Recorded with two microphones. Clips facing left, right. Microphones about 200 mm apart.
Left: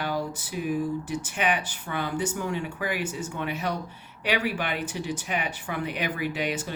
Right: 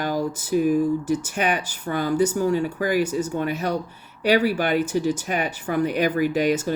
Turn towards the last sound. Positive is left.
turn(degrees=-40)  # may be behind; listen again after turning